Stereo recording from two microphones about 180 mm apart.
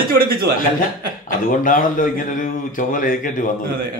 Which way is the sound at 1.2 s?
50° left (ahead or behind).